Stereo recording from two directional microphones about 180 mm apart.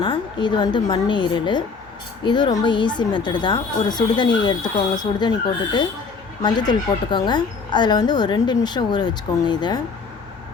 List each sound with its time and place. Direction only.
0.0 s speech: 25° left (ahead or behind)